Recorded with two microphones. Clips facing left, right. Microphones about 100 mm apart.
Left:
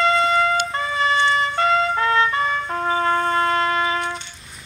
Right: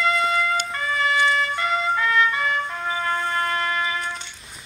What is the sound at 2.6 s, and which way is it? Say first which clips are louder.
Music: left 5 dB; 45° left (ahead or behind).